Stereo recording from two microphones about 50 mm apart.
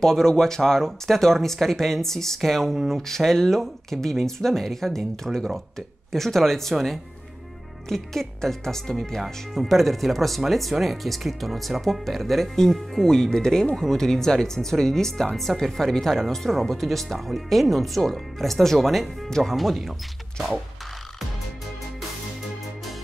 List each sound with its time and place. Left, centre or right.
0.0 s speech: centre
9.2 s speech: centre